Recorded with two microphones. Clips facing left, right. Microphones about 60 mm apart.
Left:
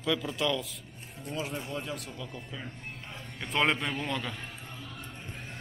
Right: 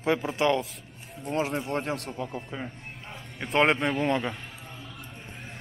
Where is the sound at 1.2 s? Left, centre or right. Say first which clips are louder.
Right 7 dB; right.